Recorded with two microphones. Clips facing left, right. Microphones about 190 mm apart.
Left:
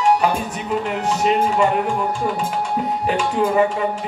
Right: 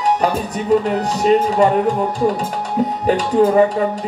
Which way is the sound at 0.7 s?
35° right (ahead or behind).